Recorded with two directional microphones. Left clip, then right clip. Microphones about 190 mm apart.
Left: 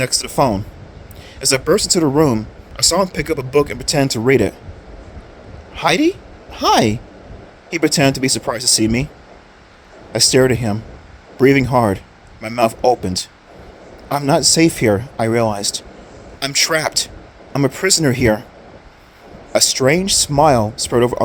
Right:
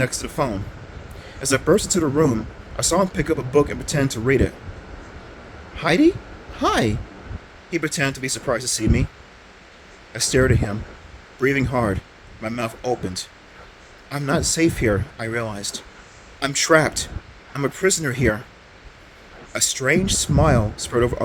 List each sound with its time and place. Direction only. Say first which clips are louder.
0.0 s speech: left 7 dB; 35° left (ahead or behind)
5.7 s speech: left 2 dB; 35° left (ahead or behind)
10.1 s speech: left 6 dB; 35° left (ahead or behind)
19.5 s speech: left 6 dB; 30° left (ahead or behind)